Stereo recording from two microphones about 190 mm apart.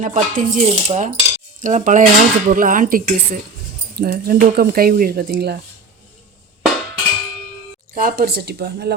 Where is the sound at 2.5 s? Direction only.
45° right (ahead or behind).